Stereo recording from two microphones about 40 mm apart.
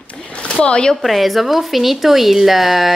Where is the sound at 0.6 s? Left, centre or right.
Left.